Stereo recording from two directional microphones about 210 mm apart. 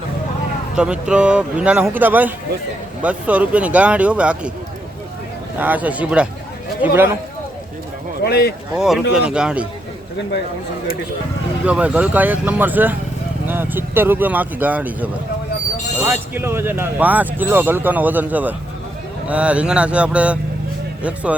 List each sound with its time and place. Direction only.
0.8 s speech: 5° right (ahead or behind)
5.5 s speech: 5° right (ahead or behind)
8.2 s speech: 50° left (ahead or behind)
8.7 s speech: 5° right (ahead or behind)
11.6 s speech: 5° right (ahead or behind)